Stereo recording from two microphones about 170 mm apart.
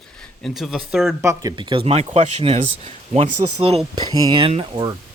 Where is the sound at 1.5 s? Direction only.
30° right (ahead or behind).